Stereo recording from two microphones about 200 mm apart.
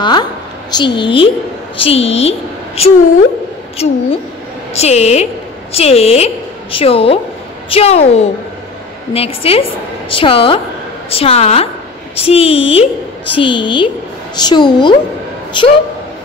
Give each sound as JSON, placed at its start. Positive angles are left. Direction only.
{"t": 0.0, "sound": "a woman's voice", "side_deg": 20}